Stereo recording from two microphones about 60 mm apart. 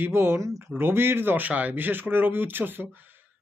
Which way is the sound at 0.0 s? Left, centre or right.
Right.